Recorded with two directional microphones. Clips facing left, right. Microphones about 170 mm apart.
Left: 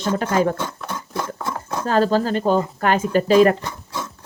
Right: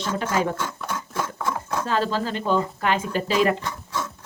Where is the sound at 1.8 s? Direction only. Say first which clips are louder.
Left 8 dB; 45° left (ahead or behind).